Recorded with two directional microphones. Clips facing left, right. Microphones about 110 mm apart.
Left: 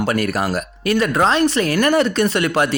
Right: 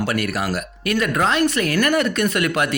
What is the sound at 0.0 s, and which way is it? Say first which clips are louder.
Speech: left 3 dB; 35° left (ahead or behind).